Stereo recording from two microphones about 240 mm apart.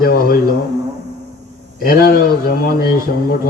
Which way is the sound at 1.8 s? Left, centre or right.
Left.